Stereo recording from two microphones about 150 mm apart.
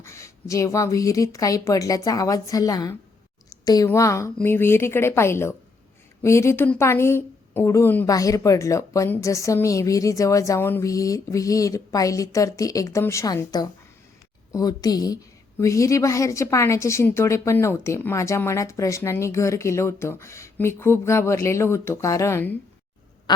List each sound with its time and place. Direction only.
0.0 s a woman's voice: 20° left (ahead or behind)